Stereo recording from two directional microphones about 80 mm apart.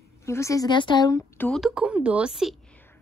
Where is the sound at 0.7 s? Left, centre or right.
Left.